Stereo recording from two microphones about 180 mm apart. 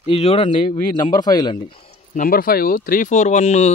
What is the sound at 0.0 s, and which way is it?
A man's voice, 35° left (ahead or behind).